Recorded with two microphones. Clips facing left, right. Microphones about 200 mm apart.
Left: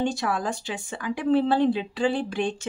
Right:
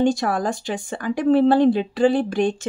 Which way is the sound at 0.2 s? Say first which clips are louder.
Right 5 dB; 45° right (ahead or behind).